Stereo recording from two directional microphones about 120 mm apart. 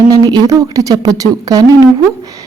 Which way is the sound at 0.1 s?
35° right (ahead or behind).